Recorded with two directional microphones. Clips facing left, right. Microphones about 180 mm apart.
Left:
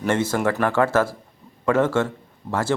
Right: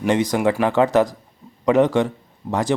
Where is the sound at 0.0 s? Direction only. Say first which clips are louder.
Right 3 dB; 15° right (ahead or behind).